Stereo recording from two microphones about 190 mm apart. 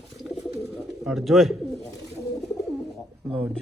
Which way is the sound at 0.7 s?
Centre (ahead or behind).